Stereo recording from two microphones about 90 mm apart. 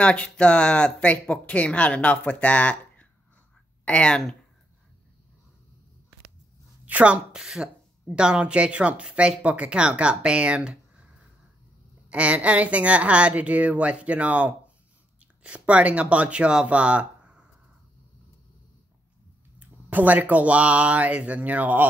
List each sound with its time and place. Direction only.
0.0 s speech: 15° left (ahead or behind)
6.9 s a woman's voice: 15° right (ahead or behind)
12.1 s a woman's voice: 15° right (ahead or behind)
19.6 s a woman's voice: 20° right (ahead or behind)